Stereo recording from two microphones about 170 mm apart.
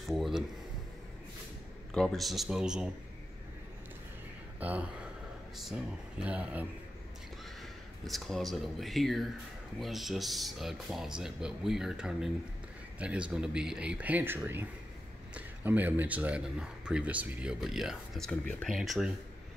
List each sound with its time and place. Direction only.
0.1 s a sound: centre (ahead or behind)
2.0 s speech: centre (ahead or behind)
4.6 s speech: 10° right (ahead or behind)
8.1 s speech: centre (ahead or behind)